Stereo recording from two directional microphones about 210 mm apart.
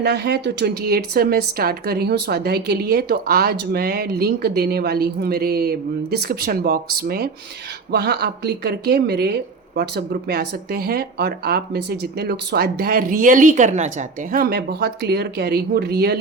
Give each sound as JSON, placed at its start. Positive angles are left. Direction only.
{"t": 0.0, "sound": "speech", "side_deg": -50}
{"t": 14.3, "sound": "speech", "side_deg": -50}